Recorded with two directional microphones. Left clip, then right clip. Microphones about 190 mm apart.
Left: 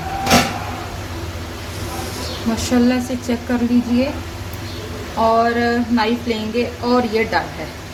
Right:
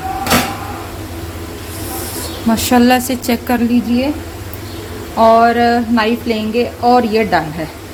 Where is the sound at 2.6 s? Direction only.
60° right (ahead or behind).